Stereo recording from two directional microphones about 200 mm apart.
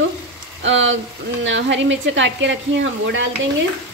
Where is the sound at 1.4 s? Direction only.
65° right (ahead or behind).